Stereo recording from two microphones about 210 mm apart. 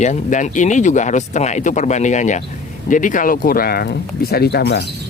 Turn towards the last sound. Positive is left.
turn(degrees=50)  # may be behind; listen again after turning